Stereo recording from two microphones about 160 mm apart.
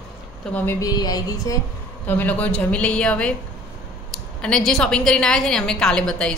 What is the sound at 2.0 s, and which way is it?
A woman's voice, 10° left (ahead or behind).